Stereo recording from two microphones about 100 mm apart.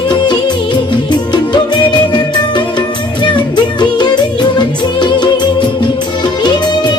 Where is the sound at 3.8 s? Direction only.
45° left (ahead or behind).